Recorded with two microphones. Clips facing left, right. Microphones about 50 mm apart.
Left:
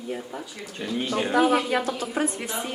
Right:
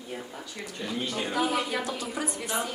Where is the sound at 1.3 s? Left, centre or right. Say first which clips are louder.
Left 7 dB; left.